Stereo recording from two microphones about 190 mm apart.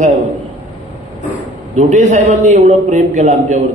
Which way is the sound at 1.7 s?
40° right (ahead or behind).